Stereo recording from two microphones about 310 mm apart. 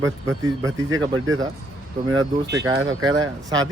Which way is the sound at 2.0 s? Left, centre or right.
Right.